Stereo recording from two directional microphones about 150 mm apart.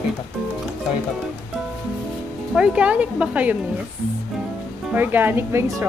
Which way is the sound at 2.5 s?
5° right (ahead or behind).